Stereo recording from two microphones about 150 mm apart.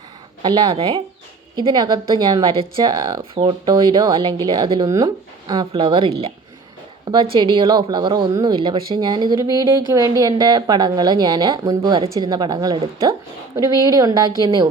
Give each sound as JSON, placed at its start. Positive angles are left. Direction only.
{"t": 0.4, "sound": "a woman's voice", "side_deg": -30}
{"t": 7.1, "sound": "a woman's voice", "side_deg": -30}